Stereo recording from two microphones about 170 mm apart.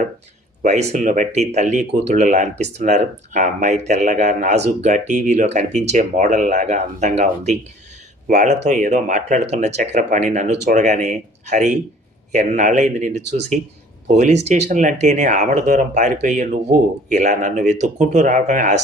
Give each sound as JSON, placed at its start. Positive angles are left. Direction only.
{"t": 0.6, "sound": "speech", "side_deg": -45}